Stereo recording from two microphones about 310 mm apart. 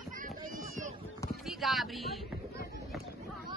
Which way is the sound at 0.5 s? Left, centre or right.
Right.